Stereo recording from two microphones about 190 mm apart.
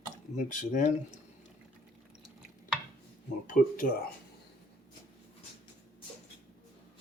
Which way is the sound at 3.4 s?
45° left (ahead or behind).